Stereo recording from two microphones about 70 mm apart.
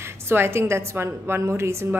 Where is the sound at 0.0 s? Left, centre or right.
Right.